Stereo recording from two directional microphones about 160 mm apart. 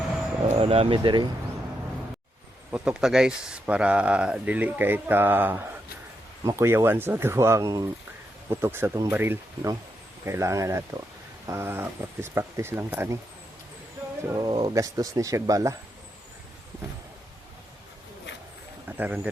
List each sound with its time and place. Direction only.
0.6 s speech: 35° right (ahead or behind)
2.7 s speech: 5° right (ahead or behind)
14.3 s speech: 25° right (ahead or behind)
18.9 s speech: 10° right (ahead or behind)